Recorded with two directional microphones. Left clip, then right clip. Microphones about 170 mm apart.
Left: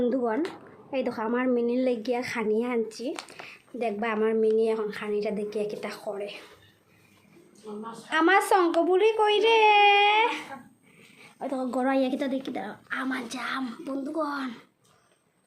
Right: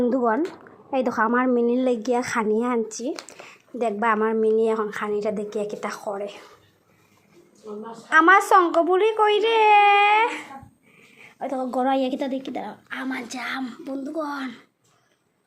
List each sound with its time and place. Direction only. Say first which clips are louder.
1.2 s a woman's voice: right 6 dB; 10° right (ahead or behind)
8.1 s a woman's voice: right 7 dB; 10° right (ahead or behind)